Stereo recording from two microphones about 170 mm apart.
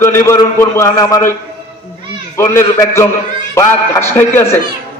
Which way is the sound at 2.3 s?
20° left (ahead or behind).